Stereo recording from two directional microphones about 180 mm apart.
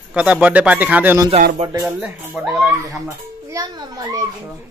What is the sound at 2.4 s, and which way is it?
Mantra, 5° right (ahead or behind).